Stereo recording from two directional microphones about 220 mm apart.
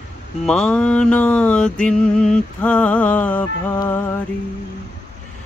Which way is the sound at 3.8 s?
10° left (ahead or behind).